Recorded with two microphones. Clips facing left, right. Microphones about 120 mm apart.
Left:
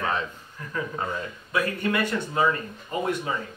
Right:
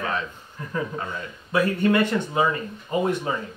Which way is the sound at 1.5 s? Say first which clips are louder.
Right 6 dB; 25° right (ahead or behind).